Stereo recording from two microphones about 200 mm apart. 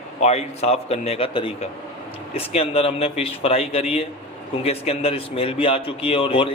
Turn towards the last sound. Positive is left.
turn(degrees=25)  # may be behind; listen again after turning